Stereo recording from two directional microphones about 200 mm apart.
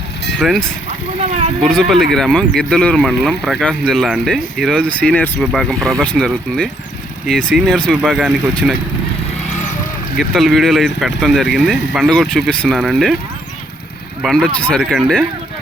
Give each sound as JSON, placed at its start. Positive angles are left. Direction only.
{"t": 0.3, "sound": "speech", "side_deg": 0}
{"t": 1.6, "sound": "speech", "side_deg": 5}
{"t": 9.5, "sound": "vehicle", "side_deg": 35}
{"t": 10.2, "sound": "speech", "side_deg": 0}
{"t": 14.2, "sound": "speech", "side_deg": 0}